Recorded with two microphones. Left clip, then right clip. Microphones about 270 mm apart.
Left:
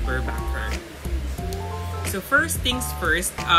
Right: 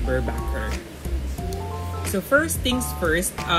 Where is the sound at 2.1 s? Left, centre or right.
Centre.